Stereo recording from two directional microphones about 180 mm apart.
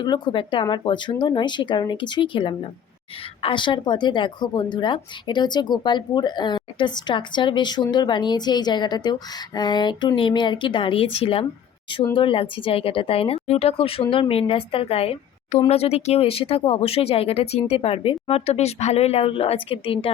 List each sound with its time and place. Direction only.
0.0 s speech: 25° left (ahead or behind)